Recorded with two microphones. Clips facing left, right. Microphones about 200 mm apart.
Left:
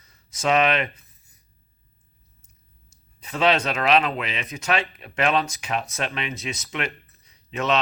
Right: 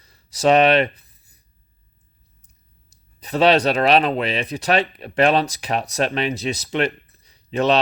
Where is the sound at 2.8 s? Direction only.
35° right (ahead or behind).